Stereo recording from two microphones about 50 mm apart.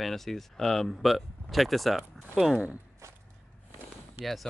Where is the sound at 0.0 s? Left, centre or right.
Centre.